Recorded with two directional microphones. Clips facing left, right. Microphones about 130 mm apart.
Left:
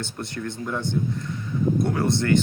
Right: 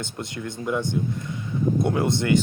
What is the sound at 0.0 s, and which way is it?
Speech, 20° right (ahead or behind).